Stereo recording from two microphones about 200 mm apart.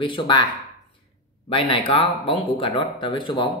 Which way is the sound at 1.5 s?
25° left (ahead or behind).